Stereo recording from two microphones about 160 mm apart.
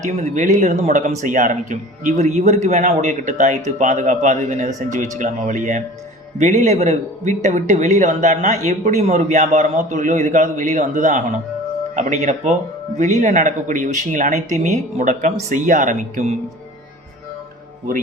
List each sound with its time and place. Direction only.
0.0 s a man's voice: 50° right (ahead or behind)